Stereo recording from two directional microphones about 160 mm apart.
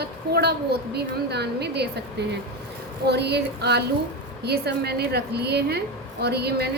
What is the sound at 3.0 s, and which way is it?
A woman's voice, 90° right.